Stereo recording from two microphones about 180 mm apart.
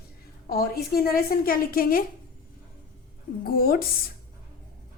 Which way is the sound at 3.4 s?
55° left (ahead or behind).